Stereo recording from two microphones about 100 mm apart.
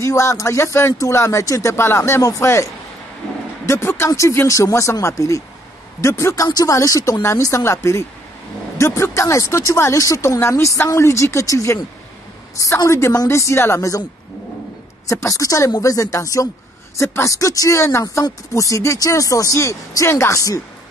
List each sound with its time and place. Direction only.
0.0 s speech: 30° left (ahead or behind)
15.0 s speech: 30° left (ahead or behind)